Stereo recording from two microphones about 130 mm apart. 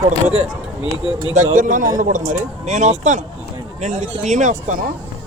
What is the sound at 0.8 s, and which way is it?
Speech, 35° left (ahead or behind).